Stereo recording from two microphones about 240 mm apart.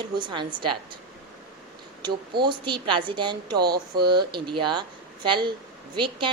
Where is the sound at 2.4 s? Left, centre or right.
Centre.